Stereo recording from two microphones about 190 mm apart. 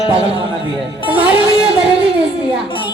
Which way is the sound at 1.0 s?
25° left (ahead or behind).